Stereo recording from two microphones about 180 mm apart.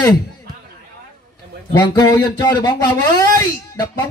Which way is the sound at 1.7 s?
20° left (ahead or behind).